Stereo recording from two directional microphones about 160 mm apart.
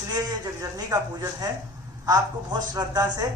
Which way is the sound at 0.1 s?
20° right (ahead or behind).